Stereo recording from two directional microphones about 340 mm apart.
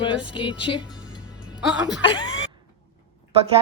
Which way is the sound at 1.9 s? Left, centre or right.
Centre.